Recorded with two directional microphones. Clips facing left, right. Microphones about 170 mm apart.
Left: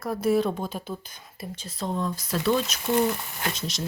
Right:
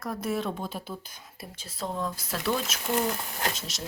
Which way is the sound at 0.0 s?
5° left (ahead or behind).